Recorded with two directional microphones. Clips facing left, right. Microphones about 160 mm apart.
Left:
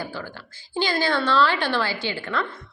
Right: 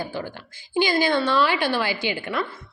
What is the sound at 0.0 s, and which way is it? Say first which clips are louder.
A woman's voice: right 3 dB; 20° right (ahead or behind).